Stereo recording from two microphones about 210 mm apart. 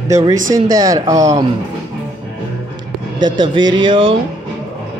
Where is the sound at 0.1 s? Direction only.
15° right (ahead or behind).